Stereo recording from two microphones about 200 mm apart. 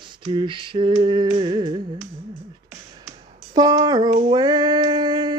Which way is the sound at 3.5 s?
20° right (ahead or behind).